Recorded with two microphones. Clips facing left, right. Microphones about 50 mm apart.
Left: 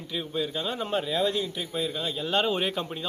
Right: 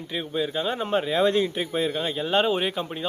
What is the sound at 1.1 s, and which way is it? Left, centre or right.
Speech, right.